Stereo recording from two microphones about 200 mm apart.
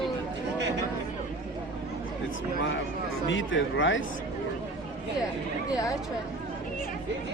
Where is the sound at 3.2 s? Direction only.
70° left (ahead or behind).